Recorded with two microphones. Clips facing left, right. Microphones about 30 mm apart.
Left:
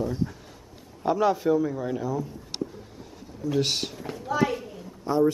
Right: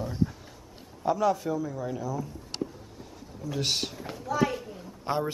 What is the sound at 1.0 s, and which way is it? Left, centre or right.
A man's voice, left.